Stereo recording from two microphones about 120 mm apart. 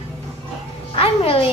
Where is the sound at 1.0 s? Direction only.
50° left (ahead or behind).